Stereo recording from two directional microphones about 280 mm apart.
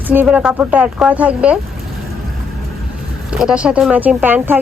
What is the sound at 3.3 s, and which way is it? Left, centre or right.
Speech, centre.